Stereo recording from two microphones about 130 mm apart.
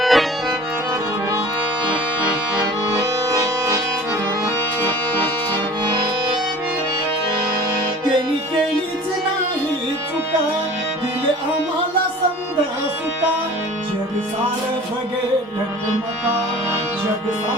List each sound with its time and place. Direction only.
0.0 s music: centre (ahead or behind)
3.0 s music: 25° right (ahead or behind)